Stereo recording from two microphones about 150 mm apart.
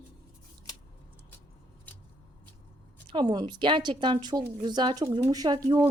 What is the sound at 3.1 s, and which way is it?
Speech, 30° right (ahead or behind).